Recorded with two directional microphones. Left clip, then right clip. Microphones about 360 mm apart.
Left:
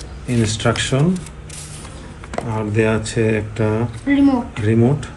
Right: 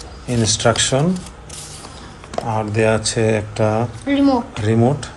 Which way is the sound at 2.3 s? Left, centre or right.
Centre.